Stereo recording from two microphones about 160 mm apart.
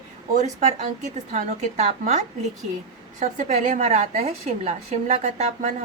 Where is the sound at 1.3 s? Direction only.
50° right (ahead or behind).